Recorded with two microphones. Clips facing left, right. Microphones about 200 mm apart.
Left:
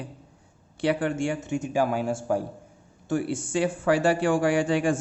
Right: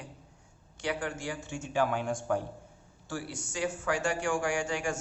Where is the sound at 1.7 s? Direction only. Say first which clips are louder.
Left 3 dB; 10° left (ahead or behind).